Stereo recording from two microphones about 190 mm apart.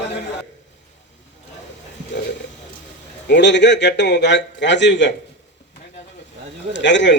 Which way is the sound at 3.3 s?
70° left (ahead or behind).